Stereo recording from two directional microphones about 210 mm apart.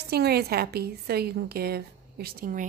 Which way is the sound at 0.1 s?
50° right (ahead or behind).